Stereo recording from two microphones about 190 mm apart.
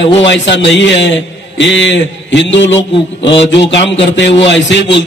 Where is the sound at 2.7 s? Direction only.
30° left (ahead or behind).